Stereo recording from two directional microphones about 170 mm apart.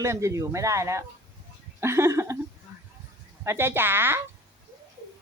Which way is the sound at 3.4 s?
15° right (ahead or behind).